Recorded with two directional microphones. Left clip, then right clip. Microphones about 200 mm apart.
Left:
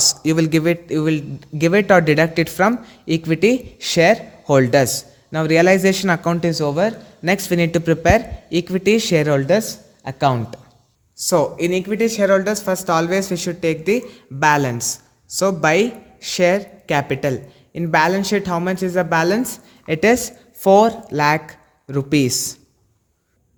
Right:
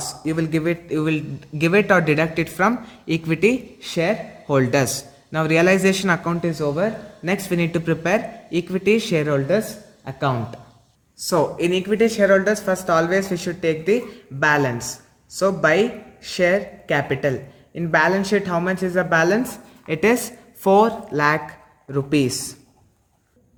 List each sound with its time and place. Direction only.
0.1 s speech: 50° left (ahead or behind); by 3.6 s 25° left (ahead or behind)
3.8 s speech: 40° left (ahead or behind)